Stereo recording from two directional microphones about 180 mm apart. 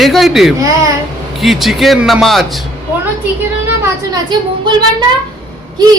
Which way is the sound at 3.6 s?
15° right (ahead or behind).